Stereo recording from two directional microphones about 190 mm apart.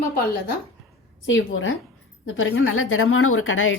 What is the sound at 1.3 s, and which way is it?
A woman's voice, 90° left.